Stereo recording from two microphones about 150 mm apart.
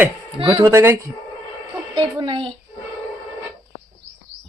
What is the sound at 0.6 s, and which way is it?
Speech, 20° right (ahead or behind).